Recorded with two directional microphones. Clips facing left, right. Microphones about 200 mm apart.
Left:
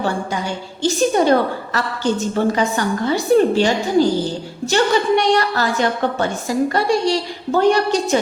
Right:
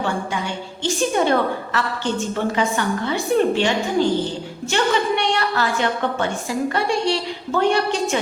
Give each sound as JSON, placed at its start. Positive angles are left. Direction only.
{"t": 0.8, "sound": "a woman's voice", "side_deg": 40}